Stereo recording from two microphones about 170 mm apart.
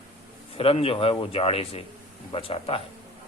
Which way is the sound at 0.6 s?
35° left (ahead or behind).